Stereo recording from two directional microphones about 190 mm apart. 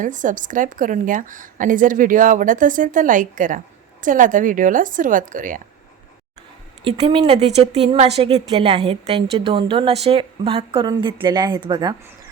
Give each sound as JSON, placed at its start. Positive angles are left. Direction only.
{"t": 0.0, "sound": "a woman's voice", "side_deg": -45}
{"t": 6.8, "sound": "a woman's voice", "side_deg": -25}